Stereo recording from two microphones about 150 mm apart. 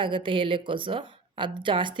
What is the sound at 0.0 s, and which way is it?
A woman's voice, 35° right (ahead or behind).